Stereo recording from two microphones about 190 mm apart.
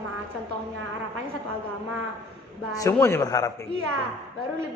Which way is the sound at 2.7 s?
15° left (ahead or behind).